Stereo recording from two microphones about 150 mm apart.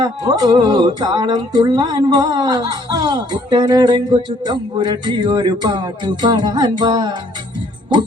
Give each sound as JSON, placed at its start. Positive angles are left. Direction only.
{"t": 0.0, "sound": "speech", "side_deg": -25}